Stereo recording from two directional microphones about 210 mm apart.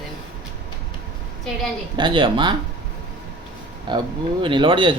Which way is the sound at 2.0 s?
20° right (ahead or behind).